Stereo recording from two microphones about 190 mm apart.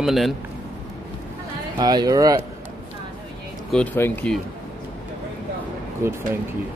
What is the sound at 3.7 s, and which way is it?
Speech, 5° left (ahead or behind).